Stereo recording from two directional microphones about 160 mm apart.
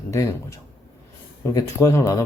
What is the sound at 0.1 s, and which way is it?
Speech, 20° left (ahead or behind).